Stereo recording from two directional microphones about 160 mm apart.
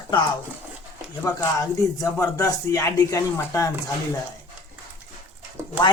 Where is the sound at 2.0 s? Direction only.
20° left (ahead or behind).